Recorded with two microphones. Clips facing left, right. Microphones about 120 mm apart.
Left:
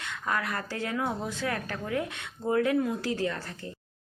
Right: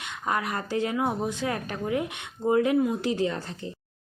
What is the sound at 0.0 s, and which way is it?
A woman's voice, 20° right (ahead or behind).